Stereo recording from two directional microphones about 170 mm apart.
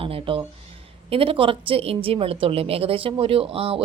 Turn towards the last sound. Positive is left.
turn(degrees=-30)  # may be behind; listen again after turning